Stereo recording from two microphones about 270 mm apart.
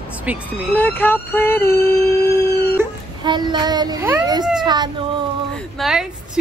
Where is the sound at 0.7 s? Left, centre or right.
Centre.